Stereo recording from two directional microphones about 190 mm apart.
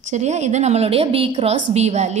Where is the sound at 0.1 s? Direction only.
35° right (ahead or behind).